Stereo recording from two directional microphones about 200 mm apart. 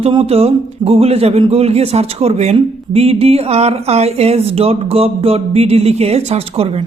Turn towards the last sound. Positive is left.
turn(degrees=-30)  # may be behind; listen again after turning